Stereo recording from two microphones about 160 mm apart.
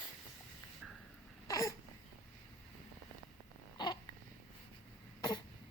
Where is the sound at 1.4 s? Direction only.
20° left (ahead or behind).